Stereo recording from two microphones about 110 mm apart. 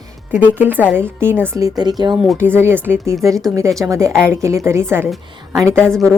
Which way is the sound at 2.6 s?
20° right (ahead or behind).